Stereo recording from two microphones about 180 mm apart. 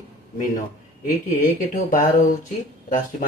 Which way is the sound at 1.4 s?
45° left (ahead or behind).